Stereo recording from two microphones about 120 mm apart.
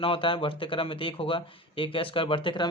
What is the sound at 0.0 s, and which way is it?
Speech, 45° left (ahead or behind).